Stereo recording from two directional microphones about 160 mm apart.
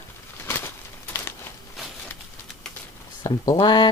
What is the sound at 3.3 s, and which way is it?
Speech, 20° left (ahead or behind).